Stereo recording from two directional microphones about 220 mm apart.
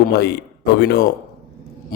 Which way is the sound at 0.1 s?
50° left (ahead or behind).